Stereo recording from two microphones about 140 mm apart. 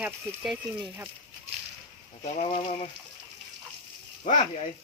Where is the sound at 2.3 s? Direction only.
55° left (ahead or behind).